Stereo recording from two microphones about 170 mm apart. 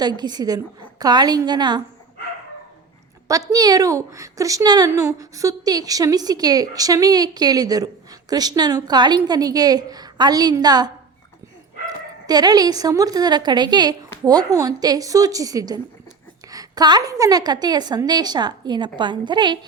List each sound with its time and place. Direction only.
0.0 s a woman's voice: 25° right (ahead or behind)
3.2 s a woman's voice: 20° right (ahead or behind)
12.2 s a woman's voice: 25° right (ahead or behind)